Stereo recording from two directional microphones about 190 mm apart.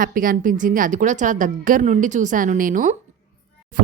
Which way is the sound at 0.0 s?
45° right (ahead or behind).